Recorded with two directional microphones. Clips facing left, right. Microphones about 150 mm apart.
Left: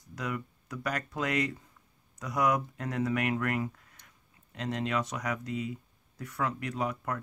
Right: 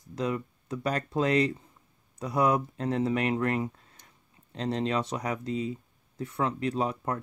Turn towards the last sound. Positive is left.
turn(degrees=-30)  # may be behind; listen again after turning